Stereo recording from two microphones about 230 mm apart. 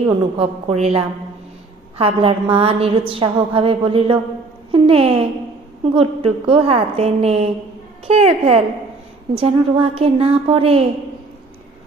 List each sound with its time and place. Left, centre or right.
0.4 s a woman's voice: right